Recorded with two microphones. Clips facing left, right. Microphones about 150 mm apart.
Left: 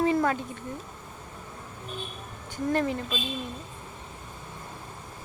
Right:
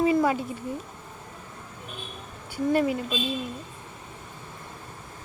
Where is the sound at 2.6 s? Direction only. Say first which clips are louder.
Right 3 dB; 5° right (ahead or behind).